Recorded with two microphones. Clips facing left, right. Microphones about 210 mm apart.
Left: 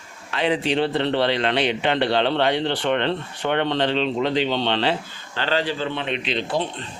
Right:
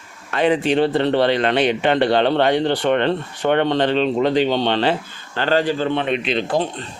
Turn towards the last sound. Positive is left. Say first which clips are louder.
# right 4 dB
turn(degrees=-45)  # may be behind; listen again after turning